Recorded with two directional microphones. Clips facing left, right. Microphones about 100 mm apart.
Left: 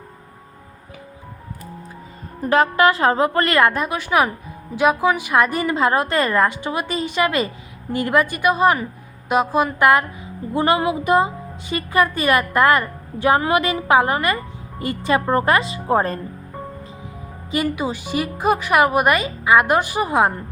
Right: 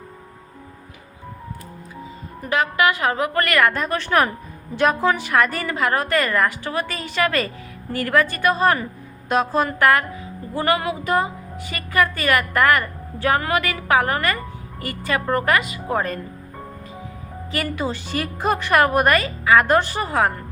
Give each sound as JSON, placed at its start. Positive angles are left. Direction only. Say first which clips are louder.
{"t": 2.4, "sound": "a woman's voice", "louder": "left 4 dB", "side_deg": 35}
{"t": 3.7, "sound": "a woman's voice", "louder": "left 1 dB", "side_deg": 10}
{"t": 17.5, "sound": "a woman's voice", "louder": "left 3 dB", "side_deg": 15}